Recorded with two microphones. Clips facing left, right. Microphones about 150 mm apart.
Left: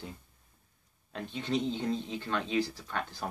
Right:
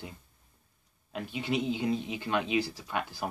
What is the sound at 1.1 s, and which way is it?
Speech, 10° right (ahead or behind).